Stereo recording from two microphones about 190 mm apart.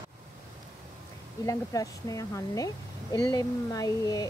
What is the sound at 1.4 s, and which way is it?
Speech, 20° left (ahead or behind).